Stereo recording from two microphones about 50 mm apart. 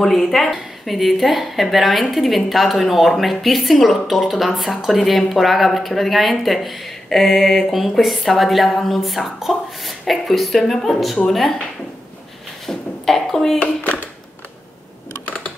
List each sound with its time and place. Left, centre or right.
0.0 s a woman's voice: centre
12.6 s a sound: centre
13.6 s a child's voice: left